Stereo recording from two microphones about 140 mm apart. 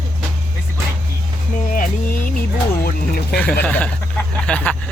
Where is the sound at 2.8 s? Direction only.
90° left.